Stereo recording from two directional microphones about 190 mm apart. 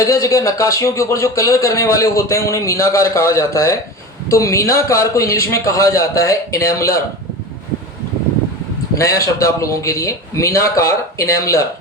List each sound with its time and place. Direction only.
0.0 s speech: 15° left (ahead or behind)
9.0 s speech: 15° left (ahead or behind)